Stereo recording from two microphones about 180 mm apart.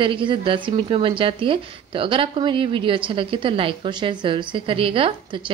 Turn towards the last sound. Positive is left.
turn(degrees=-30)  # may be behind; listen again after turning